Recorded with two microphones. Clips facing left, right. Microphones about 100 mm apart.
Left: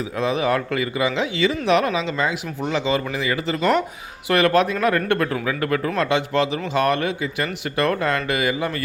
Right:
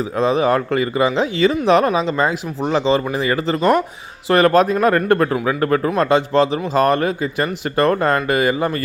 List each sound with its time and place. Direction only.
0.2 s speech: 35° right (ahead or behind)